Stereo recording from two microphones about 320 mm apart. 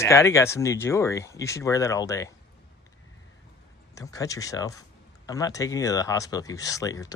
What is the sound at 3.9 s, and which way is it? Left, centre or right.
Speech, centre.